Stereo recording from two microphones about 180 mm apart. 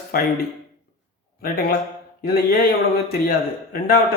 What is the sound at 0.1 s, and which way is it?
Speech, 55° left (ahead or behind).